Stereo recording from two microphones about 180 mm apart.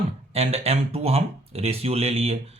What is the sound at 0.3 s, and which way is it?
Speech, 35° right (ahead or behind).